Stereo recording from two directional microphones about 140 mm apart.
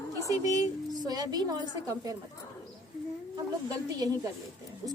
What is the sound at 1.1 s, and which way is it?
A woman's voice, 25° right (ahead or behind).